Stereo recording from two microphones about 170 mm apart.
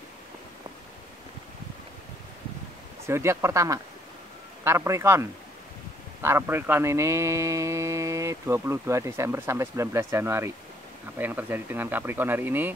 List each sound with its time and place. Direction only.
3.1 s speech: 15° right (ahead or behind)